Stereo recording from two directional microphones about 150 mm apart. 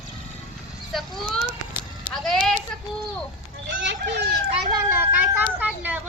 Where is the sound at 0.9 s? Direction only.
Centre (ahead or behind).